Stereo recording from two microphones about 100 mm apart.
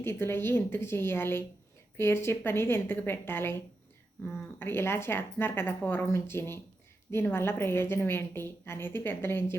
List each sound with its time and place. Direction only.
0.0 s a woman's voice: 25° left (ahead or behind)